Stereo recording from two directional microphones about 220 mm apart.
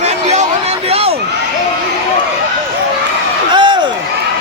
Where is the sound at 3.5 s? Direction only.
20° right (ahead or behind).